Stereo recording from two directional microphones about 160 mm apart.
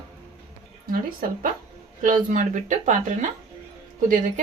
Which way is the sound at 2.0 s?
55° right (ahead or behind).